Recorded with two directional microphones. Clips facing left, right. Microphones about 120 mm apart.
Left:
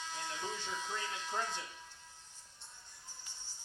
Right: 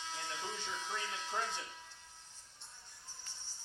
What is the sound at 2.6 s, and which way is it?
Music, 15° left (ahead or behind).